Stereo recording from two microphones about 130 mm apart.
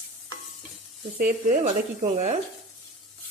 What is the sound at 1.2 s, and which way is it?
Speech, 75° right (ahead or behind).